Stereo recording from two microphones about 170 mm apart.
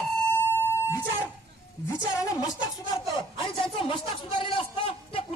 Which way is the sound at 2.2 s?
20° left (ahead or behind).